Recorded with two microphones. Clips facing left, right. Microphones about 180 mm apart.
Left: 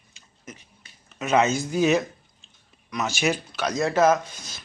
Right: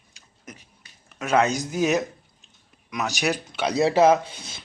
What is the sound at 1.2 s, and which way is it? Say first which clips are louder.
Speech: even; 5° left (ahead or behind).